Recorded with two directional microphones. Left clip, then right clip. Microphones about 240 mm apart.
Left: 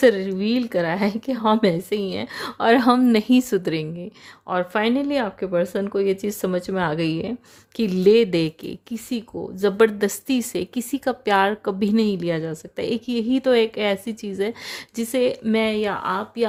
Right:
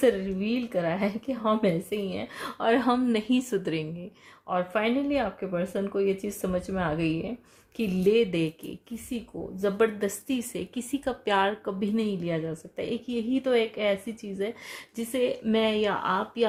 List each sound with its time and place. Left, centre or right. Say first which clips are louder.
0.0 s a woman's voice: left 7 dB; left